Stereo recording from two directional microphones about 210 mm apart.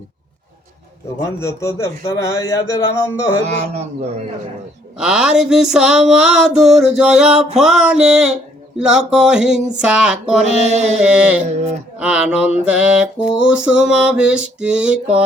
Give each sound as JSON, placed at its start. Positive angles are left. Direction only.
{"t": 1.2, "sound": "a man's voice", "side_deg": 15}
{"t": 3.4, "sound": "a man's voice", "side_deg": -30}
{"t": 4.9, "sound": "mantra", "side_deg": -5}